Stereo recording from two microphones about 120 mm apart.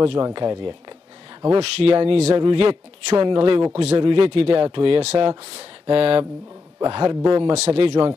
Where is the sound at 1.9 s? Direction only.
45° right (ahead or behind).